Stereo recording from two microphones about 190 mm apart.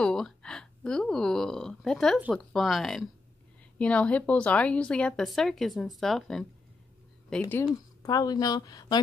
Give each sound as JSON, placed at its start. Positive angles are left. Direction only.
{"t": 0.0, "sound": "a woman's voice", "side_deg": 5}
{"t": 7.5, "sound": "speech", "side_deg": 15}